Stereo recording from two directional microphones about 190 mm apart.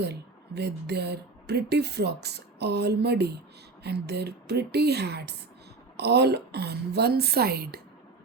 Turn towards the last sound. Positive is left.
turn(degrees=-55)  # may be behind; listen again after turning